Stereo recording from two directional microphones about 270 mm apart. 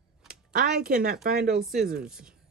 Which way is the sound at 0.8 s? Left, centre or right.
Right.